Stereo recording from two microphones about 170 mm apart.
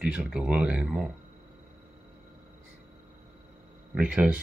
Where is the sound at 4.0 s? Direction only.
10° right (ahead or behind).